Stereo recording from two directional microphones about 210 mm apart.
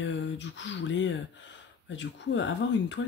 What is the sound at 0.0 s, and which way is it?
Speech, 60° left (ahead or behind).